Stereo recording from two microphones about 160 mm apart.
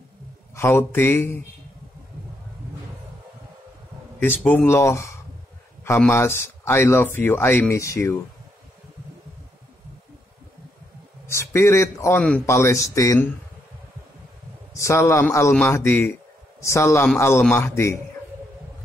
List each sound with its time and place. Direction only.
0.6 s speech: 15° left (ahead or behind)
4.2 s speech: 10° left (ahead or behind)
11.2 s speech: 15° left (ahead or behind)
14.7 s speech: 20° left (ahead or behind)